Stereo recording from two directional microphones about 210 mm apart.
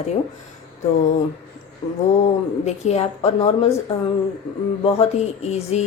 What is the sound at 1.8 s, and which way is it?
A woman's voice, 25° left (ahead or behind).